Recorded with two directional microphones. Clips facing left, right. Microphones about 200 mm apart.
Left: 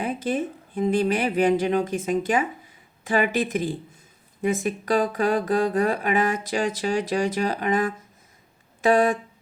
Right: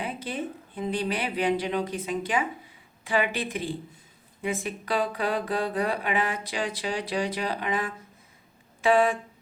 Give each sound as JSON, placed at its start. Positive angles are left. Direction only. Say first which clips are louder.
{"t": 0.0, "sound": "speech", "louder": "left 7 dB", "side_deg": 45}